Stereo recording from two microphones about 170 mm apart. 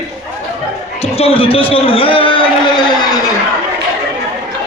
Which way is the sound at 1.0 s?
35° left (ahead or behind).